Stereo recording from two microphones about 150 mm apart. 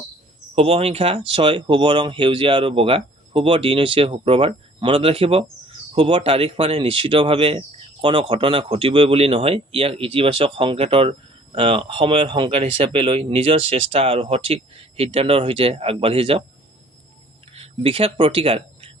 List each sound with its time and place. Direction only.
0.5 s speech: 40° right (ahead or behind)
17.5 s speech: 40° right (ahead or behind)